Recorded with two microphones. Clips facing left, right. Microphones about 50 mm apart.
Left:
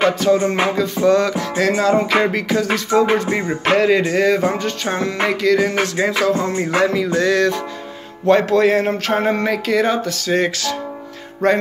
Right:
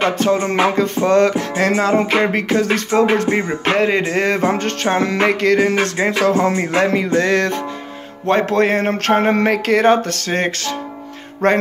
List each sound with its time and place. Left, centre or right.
0.0 s speech: right
0.5 s music: right
3.7 s speech: right
4.0 s music: right
8.3 s speech: right
8.8 s speech: right
11.4 s music: right